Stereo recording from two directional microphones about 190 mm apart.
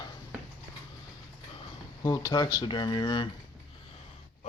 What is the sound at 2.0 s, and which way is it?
Speech, 20° left (ahead or behind).